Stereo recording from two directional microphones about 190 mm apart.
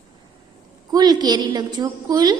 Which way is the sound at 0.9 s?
20° right (ahead or behind).